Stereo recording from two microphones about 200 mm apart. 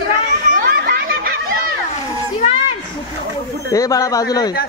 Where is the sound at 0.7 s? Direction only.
50° right (ahead or behind).